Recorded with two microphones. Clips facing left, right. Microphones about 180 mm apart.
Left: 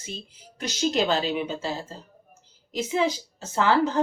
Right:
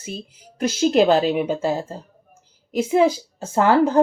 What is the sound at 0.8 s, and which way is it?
Speech, 50° right (ahead or behind).